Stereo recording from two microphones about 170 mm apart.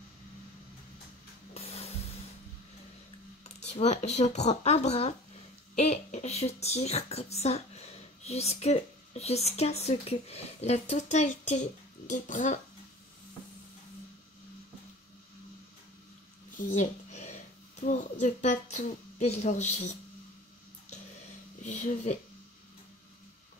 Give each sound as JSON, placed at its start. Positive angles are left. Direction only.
{"t": 1.5, "sound": "music", "side_deg": 35}
{"t": 3.4, "sound": "a woman's voice", "side_deg": 40}
{"t": 16.5, "sound": "a sound", "side_deg": 50}
{"t": 17.7, "sound": "a woman's voice", "side_deg": 45}
{"t": 21.6, "sound": "a woman's voice", "side_deg": 45}